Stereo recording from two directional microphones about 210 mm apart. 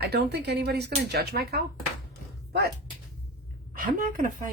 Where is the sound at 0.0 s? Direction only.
50° right (ahead or behind).